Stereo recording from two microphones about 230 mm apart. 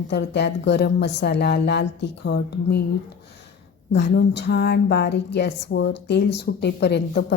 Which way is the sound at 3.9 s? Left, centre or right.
Left.